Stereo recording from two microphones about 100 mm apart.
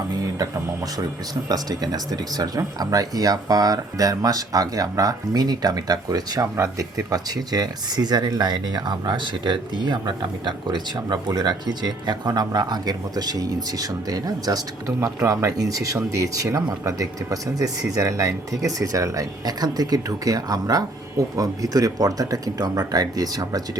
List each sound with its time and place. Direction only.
1.5 s speech: 40° right (ahead or behind)